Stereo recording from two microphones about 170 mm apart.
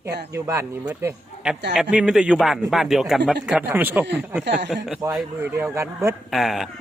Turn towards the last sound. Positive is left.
turn(degrees=0)  # may be behind; listen again after turning